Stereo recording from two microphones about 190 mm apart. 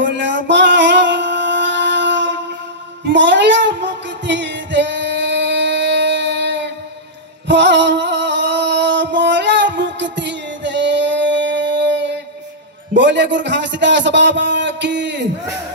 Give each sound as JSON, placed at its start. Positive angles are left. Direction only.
{"t": 0.0, "sound": "music", "side_deg": -70}
{"t": 12.9, "sound": "a man's voice", "side_deg": -70}